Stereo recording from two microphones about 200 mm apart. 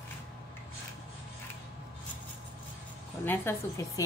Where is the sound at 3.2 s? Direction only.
10° left (ahead or behind).